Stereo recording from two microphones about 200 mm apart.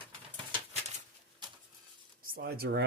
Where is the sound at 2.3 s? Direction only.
50° right (ahead or behind).